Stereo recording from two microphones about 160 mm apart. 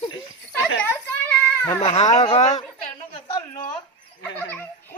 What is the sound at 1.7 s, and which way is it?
Speech, 45° left (ahead or behind).